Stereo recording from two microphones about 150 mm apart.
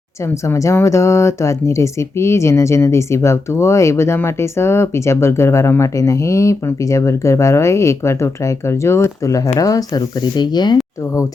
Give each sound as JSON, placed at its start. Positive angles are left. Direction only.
{"t": 0.4, "sound": "speech", "side_deg": 20}